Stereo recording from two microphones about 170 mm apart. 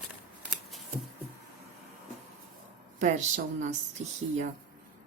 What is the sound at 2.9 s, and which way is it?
Speech, 45° right (ahead or behind).